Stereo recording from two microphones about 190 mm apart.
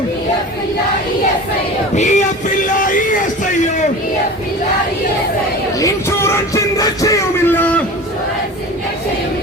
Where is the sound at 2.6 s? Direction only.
45° left (ahead or behind).